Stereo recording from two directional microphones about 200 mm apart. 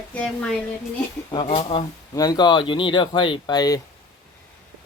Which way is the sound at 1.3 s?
25° left (ahead or behind).